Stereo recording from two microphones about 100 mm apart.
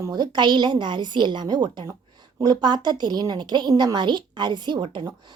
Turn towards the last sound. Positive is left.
turn(degrees=-55)  # may be behind; listen again after turning